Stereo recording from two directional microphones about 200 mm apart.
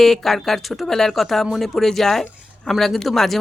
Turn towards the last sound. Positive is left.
turn(degrees=0)  # may be behind; listen again after turning